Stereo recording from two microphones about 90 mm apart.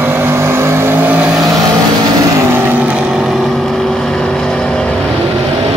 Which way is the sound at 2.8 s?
10° right (ahead or behind).